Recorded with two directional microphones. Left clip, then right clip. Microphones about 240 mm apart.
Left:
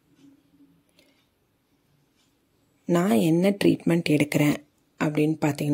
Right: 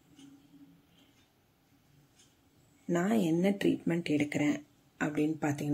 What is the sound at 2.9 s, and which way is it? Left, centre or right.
Speech, left.